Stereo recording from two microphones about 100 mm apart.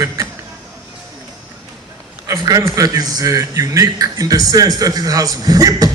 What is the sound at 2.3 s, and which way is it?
A man's voice, 35° right (ahead or behind).